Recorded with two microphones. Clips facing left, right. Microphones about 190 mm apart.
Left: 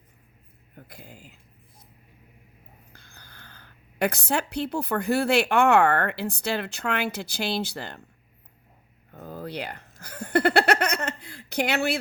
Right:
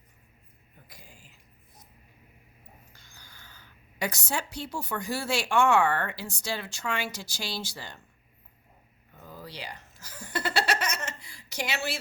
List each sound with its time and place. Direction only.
0.8 s speech: 60° left (ahead or behind)
2.9 s a woman's voice: 60° left (ahead or behind)
9.1 s speech: 55° left (ahead or behind)